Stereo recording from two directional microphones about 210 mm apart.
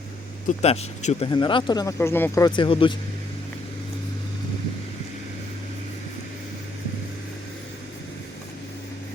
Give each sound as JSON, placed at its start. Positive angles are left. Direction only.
{"t": 0.4, "sound": "speech", "side_deg": 30}